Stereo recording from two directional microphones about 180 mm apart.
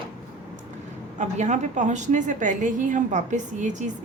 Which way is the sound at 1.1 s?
40° right (ahead or behind).